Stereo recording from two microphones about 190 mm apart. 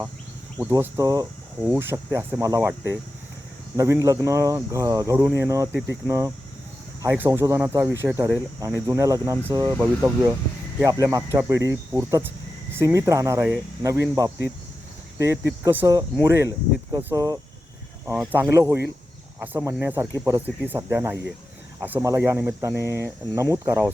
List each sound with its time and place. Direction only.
0.6 s speech: 15° right (ahead or behind)